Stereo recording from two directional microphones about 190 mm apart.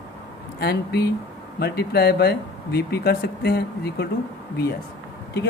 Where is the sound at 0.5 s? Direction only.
60° left (ahead or behind).